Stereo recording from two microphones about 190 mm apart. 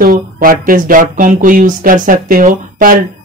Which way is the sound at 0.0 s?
50° right (ahead or behind).